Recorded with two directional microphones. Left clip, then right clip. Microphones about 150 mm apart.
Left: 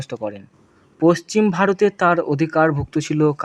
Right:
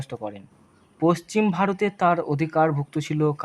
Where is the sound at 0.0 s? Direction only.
20° left (ahead or behind).